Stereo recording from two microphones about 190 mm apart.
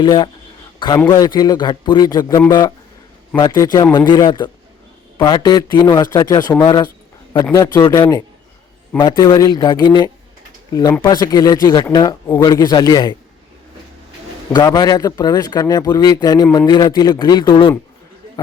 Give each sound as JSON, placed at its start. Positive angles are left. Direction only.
{"t": 0.0, "sound": "a man's voice", "side_deg": 20}
{"t": 14.5, "sound": "a man's voice", "side_deg": 20}